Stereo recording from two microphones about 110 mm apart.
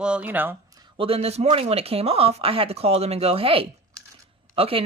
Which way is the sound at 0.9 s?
60° right (ahead or behind).